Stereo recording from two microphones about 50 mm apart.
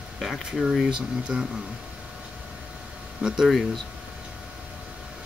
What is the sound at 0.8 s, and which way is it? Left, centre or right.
Speech, centre.